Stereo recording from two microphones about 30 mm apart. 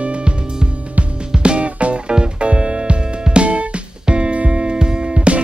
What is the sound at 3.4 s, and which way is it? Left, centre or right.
Music, right.